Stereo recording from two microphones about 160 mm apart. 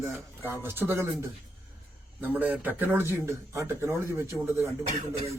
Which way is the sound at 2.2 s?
10° right (ahead or behind).